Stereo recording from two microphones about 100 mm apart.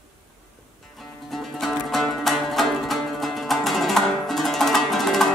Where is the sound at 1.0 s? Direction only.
Centre (ahead or behind).